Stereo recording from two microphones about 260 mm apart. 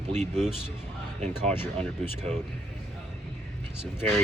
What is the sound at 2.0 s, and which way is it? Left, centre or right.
Speech, right.